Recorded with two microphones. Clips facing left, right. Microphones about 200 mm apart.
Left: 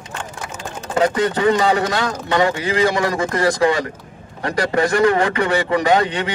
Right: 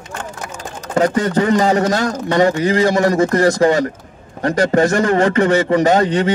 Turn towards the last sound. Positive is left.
turn(degrees=-40)  # may be behind; listen again after turning